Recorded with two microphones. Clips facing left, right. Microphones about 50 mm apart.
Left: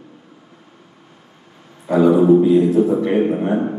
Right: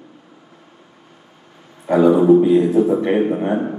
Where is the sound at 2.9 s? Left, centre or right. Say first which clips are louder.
Even; centre.